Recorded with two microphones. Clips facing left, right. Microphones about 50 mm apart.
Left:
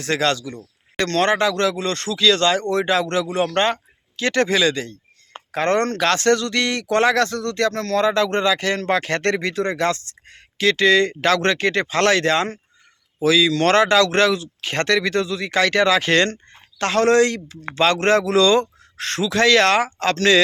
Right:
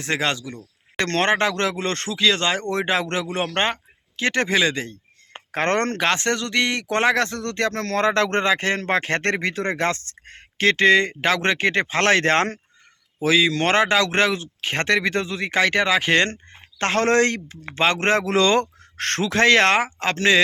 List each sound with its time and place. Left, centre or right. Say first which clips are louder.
0.0 s speech: left 3 dB; right
0.9 s speech: left 2 dB; right
6.0 s speech: left 4 dB; right
17.7 s speech: left 3 dB; right